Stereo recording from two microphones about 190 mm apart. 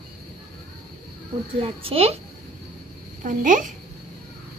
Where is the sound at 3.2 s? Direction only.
45° right (ahead or behind).